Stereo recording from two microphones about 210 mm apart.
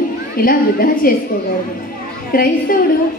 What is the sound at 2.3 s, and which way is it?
Speech, 40° left (ahead or behind).